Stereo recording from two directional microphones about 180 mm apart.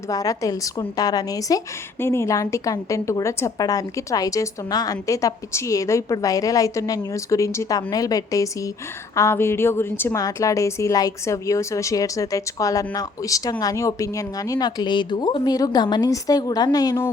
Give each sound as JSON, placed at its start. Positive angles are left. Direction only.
{"t": 0.1, "sound": "a woman's voice", "side_deg": 20}